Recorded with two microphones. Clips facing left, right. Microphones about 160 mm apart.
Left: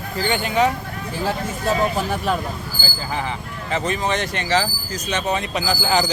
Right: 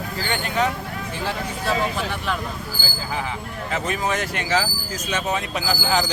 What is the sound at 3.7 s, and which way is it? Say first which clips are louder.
Speech: left 3 dB; 5° right (ahead or behind).